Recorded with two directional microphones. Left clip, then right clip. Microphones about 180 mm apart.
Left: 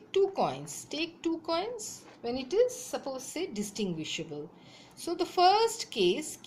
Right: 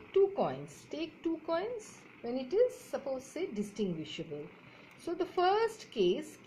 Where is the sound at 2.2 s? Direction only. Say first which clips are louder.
Left 2 dB; 25° left (ahead or behind).